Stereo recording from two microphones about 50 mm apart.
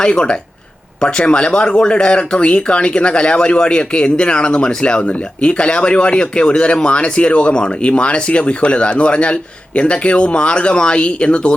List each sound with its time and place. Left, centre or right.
0.0 s speech: centre